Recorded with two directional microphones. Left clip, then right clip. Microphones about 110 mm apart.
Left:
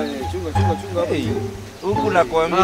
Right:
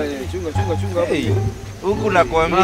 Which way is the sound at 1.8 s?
15° right (ahead or behind).